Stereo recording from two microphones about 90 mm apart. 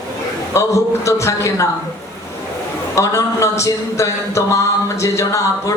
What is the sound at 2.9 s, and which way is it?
A man's voice, 35° left (ahead or behind).